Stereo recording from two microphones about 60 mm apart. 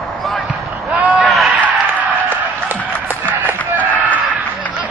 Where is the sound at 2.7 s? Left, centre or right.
Right.